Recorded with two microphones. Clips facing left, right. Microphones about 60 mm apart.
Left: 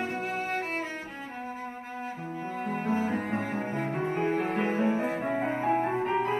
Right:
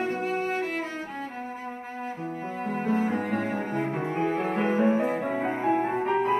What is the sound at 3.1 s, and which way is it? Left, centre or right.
Music, right.